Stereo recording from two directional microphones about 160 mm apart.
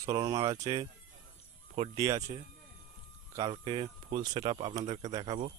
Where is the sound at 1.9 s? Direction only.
20° right (ahead or behind); by 5.5 s 40° right (ahead or behind).